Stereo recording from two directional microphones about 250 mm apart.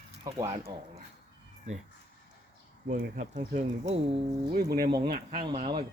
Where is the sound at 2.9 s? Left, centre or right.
Right.